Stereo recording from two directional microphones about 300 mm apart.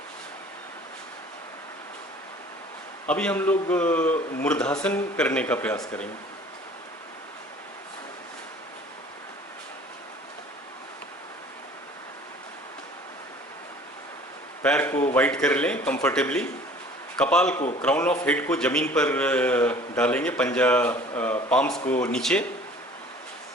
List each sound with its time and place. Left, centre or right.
3.1 s a man's voice: centre
14.6 s a man's voice: centre
17.6 s a man's voice: left
17.8 s a man's voice: centre